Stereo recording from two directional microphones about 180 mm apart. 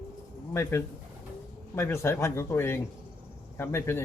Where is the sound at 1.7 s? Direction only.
15° left (ahead or behind).